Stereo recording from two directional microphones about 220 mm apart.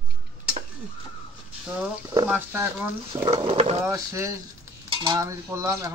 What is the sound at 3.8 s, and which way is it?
Cutlery, 15° right (ahead or behind).